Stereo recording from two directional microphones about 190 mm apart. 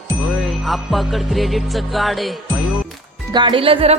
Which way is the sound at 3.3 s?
25° right (ahead or behind).